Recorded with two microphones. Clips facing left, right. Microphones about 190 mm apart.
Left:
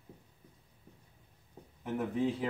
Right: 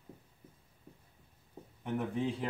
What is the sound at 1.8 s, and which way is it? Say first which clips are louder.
Speech: left 2 dB; centre (ahead or behind).